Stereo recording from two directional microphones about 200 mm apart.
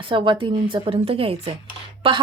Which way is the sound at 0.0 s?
25° right (ahead or behind).